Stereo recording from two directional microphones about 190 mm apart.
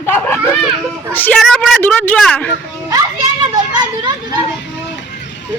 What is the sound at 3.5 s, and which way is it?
Children playing, 20° right (ahead or behind).